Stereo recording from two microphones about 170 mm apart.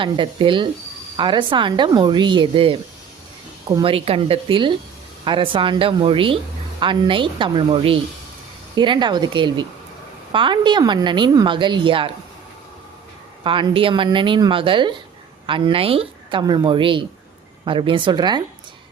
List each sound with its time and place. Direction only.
0.0 s a woman's voice: 30° right (ahead or behind)
3.8 s a woman's voice: 35° right (ahead or behind)
13.4 s a woman's voice: 30° right (ahead or behind)
16.4 s a woman's voice: 25° right (ahead or behind)